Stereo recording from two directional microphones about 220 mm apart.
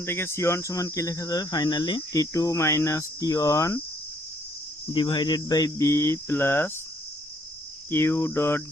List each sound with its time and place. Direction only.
0.0 s speech: 10° left (ahead or behind)
4.9 s speech: 20° left (ahead or behind)
7.9 s speech: 10° left (ahead or behind)